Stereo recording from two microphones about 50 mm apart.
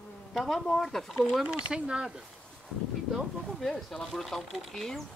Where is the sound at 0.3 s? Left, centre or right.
Centre.